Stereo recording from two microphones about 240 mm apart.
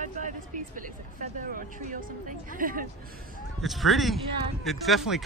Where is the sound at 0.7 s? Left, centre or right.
Right.